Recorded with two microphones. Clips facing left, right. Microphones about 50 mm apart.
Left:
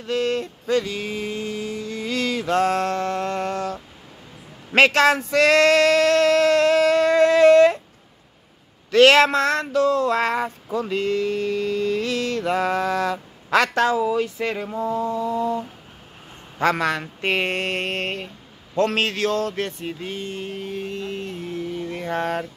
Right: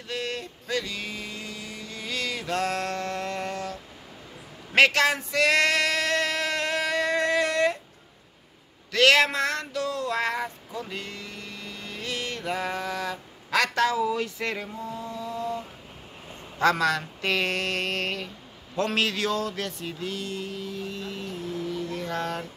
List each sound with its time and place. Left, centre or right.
0.0 s a sound: left
4.7 s male singing: left
8.9 s speech: left
9.3 s a sound: left
13.9 s speech: left
14.7 s mantra: left
15.0 s mantra: left
16.5 s speech: left
18.8 s a sound: left